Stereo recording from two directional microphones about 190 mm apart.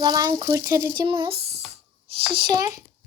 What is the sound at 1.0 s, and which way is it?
Speech, 25° right (ahead or behind).